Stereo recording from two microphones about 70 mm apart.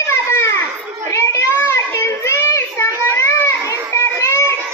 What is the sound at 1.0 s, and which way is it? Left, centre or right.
Child singing, left.